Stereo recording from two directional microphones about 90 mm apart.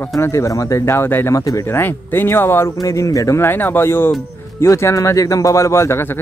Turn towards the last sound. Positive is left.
turn(degrees=30)  # may be behind; listen again after turning